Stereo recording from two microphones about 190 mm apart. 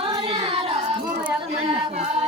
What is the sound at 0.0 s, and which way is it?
Child singing, 25° right (ahead or behind).